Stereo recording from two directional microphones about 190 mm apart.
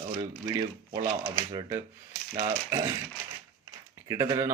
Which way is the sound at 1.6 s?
20° right (ahead or behind).